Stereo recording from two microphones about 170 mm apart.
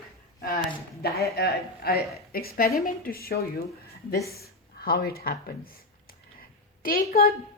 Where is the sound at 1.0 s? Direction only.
65° left (ahead or behind).